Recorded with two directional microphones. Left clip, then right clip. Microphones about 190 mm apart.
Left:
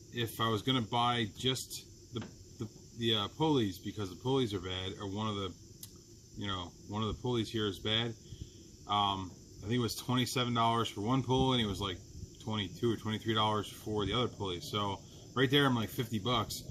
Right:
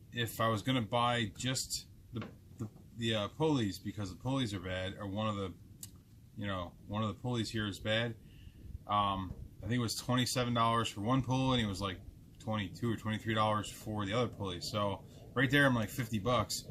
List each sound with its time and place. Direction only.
0.1 s speech: 15° right (ahead or behind)
3.0 s speech: 15° right (ahead or behind)